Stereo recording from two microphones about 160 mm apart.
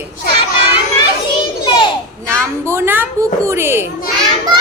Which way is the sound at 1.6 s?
30° left (ahead or behind).